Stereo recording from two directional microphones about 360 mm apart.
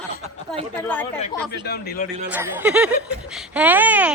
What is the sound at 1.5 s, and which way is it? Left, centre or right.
Speech, left.